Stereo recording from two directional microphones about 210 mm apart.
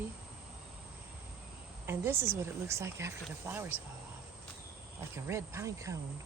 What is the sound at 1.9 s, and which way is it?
Speech, 10° right (ahead or behind).